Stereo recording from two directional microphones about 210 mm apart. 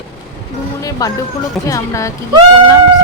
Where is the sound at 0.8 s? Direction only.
15° left (ahead or behind).